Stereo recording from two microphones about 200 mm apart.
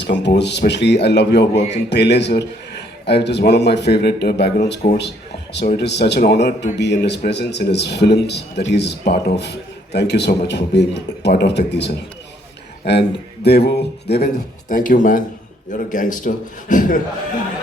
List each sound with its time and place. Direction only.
0.0 s a man's voice: 60° left (ahead or behind)
14.7 s a man's voice: 40° left (ahead or behind)